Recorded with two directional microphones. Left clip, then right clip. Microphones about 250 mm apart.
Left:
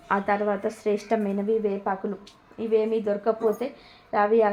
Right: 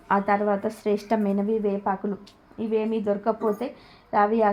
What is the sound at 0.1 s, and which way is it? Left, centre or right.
A woman's voice, centre.